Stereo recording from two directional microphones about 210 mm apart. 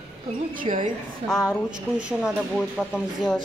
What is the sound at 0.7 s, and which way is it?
Speech, 25° right (ahead or behind).